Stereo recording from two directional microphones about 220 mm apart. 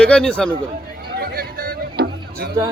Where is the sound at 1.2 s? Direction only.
45° right (ahead or behind).